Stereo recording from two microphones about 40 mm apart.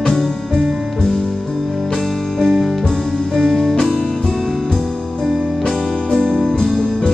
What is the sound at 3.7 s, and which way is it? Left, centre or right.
Music, centre.